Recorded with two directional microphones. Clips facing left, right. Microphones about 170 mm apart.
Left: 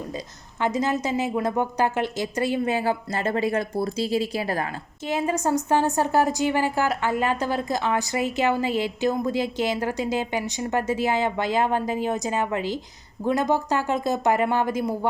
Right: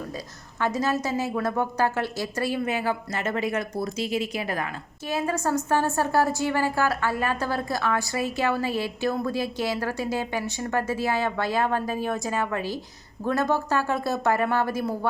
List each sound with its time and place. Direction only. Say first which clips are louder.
0.6 s a woman's voice: left 1 dB; 20° left (ahead or behind)
5.0 s a woman's voice: left 2 dB; 20° left (ahead or behind)